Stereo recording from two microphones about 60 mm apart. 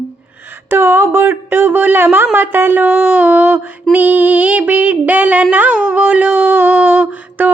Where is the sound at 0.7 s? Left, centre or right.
Right.